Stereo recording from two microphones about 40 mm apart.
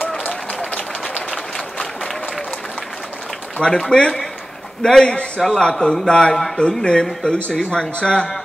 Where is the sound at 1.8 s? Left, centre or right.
Centre.